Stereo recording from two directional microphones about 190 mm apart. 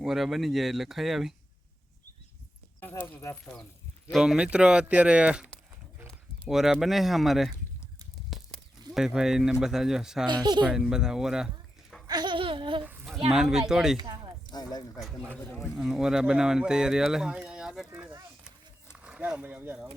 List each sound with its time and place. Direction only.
0.0 s speech: centre (ahead or behind)
2.8 s speech: 10° left (ahead or behind)
4.1 s speech: 5° right (ahead or behind)
8.3 s a sound: centre (ahead or behind)
9.0 s speech: 5° right (ahead or behind)
10.2 s speech: 25° right (ahead or behind)
10.7 s speech: 5° right (ahead or behind)
12.0 s a sound: 20° right (ahead or behind)
12.8 s a sound: 5° right (ahead or behind)
13.3 s speech: 5° right (ahead or behind)
14.0 s a sound: 20° right (ahead or behind)
14.5 s speech: 20° left (ahead or behind)
15.4 s speech: 5° left (ahead or behind)